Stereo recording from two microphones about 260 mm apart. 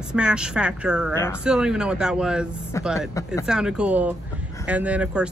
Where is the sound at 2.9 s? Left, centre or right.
Centre.